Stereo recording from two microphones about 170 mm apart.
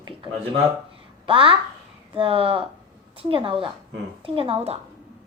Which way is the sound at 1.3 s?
30° right (ahead or behind).